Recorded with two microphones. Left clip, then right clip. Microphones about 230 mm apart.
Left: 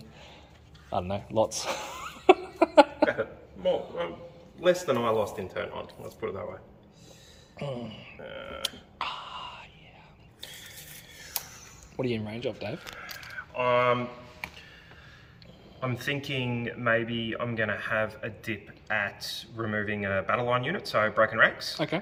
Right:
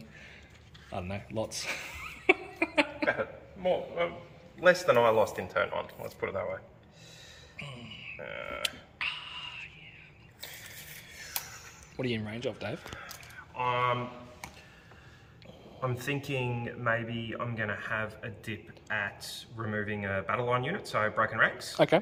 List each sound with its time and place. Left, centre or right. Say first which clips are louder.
0.9 s chuckle: left 7 dB; centre
4.6 s speech: right 2 dB; centre
7.5 s speech: left 8 dB; left
8.2 s speech: even; centre
9.0 s a sound: left 1 dB; centre
11.9 s speech: left 3 dB; centre
13.0 s a sound: left 6 dB; centre
15.8 s speech: left 2 dB; centre